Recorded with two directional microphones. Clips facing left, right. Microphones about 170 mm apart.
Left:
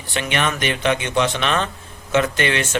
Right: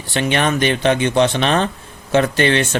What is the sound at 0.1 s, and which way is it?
Speech, 30° right (ahead or behind).